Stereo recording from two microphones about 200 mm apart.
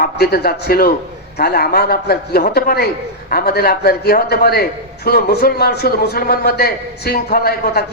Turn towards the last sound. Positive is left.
turn(degrees=50)  # may be behind; listen again after turning